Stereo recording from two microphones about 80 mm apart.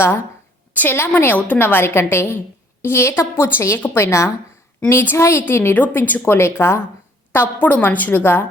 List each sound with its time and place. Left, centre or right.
0.7 s a woman's voice: left